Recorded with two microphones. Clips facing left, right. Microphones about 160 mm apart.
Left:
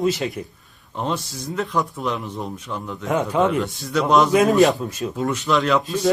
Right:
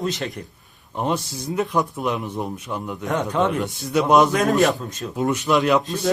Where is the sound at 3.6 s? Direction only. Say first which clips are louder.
Right 1 dB; 15° right (ahead or behind).